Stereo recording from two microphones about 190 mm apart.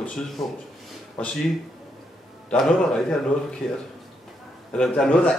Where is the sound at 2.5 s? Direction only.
Centre (ahead or behind).